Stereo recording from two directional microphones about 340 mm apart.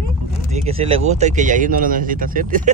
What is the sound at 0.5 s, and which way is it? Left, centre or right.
Speech, centre.